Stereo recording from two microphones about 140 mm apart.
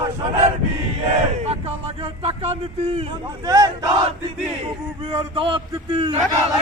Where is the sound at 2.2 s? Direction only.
45° right (ahead or behind).